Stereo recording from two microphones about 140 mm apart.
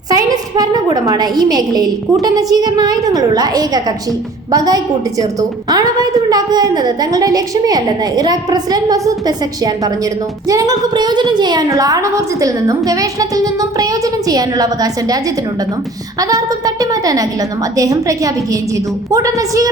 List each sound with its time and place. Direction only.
0.1 s a woman's voice: 25° right (ahead or behind)
16.2 s a woman's voice: 25° right (ahead or behind)